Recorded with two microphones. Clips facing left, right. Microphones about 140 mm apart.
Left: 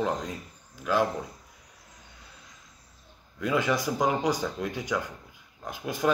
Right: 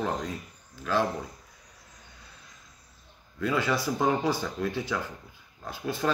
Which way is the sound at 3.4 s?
20° left (ahead or behind).